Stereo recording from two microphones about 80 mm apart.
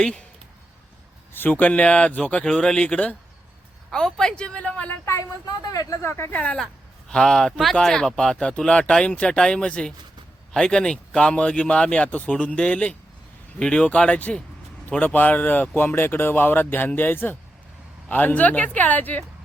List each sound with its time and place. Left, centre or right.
1.3 s speech: left
5.5 s speech: left
6.1 s speech: left
6.3 s speech: centre